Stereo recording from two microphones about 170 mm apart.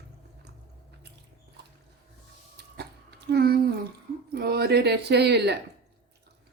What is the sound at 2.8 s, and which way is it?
Hiccup, 75° right (ahead or behind).